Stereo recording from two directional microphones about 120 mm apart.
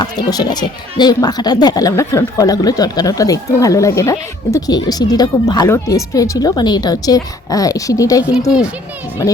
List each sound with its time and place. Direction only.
0.0 s speech: 35° left (ahead or behind)